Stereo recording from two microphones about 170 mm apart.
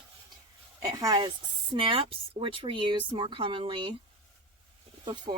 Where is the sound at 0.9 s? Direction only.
25° right (ahead or behind).